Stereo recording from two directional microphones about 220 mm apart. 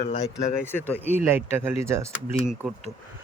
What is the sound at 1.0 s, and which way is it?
Speech, 10° right (ahead or behind).